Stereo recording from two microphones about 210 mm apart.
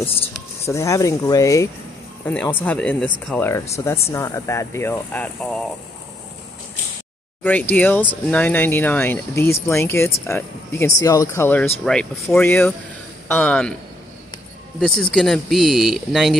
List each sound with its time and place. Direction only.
0.7 s speech: 15° left (ahead or behind)
7.4 s speech: 10° left (ahead or behind)
14.8 s speech: 5° left (ahead or behind)